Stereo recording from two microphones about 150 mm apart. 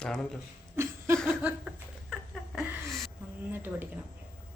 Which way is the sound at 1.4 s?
5° right (ahead or behind).